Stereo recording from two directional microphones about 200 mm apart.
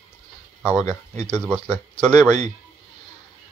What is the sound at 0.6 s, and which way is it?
Speech, 10° right (ahead or behind).